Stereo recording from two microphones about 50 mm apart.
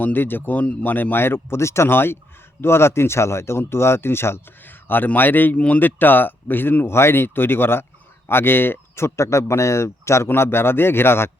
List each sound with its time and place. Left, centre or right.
0.0 s speech: left
1.9 s speech: left
4.6 s a man's voice: left
5.5 s speech: left
5.8 s speech: left
9.0 s a man's voice: left
10.2 s speech: left